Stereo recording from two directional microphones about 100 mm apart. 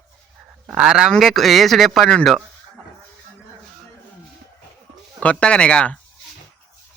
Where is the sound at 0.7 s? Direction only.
5° right (ahead or behind).